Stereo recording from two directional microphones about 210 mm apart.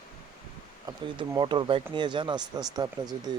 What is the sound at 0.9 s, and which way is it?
Speech, 20° right (ahead or behind).